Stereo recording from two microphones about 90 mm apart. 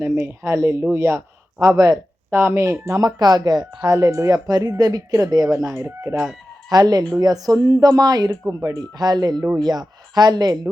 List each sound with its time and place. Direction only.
0.0 s speech: 30° right (ahead or behind)
3.0 s speech: 50° right (ahead or behind)
3.8 s speech: 35° right (ahead or behind)
6.7 s speech: 45° right (ahead or behind)
8.3 s speech: 30° right (ahead or behind)
9.0 s speech: 50° right (ahead or behind)